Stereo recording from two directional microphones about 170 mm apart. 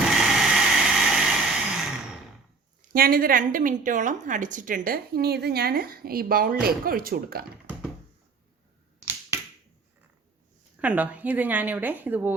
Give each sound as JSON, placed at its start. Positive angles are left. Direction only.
{"t": 0.2, "sound": "vehicle", "side_deg": -5}
{"t": 2.9, "sound": "a woman's voice", "side_deg": -60}
{"t": 10.8, "sound": "speech", "side_deg": -10}